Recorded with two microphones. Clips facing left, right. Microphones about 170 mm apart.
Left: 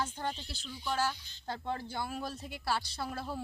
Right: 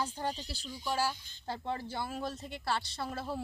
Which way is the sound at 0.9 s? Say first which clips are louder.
Even; 10° right (ahead or behind).